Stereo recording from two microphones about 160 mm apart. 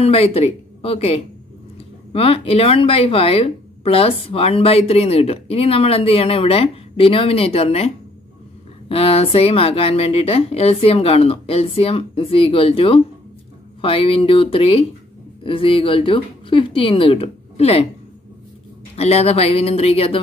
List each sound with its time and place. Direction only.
0.0 s speech: 40° left (ahead or behind)
18.9 s speech: 40° left (ahead or behind)